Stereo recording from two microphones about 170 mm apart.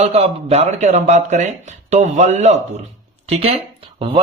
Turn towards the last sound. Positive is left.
turn(degrees=-35)  # may be behind; listen again after turning